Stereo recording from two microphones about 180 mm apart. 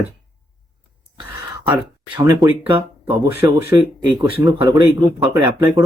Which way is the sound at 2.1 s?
25° right (ahead or behind).